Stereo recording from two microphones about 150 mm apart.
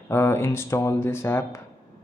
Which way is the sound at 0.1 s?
15° left (ahead or behind).